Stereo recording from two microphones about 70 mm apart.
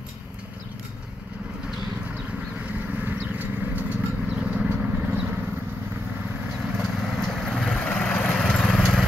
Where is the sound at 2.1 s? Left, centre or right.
Centre.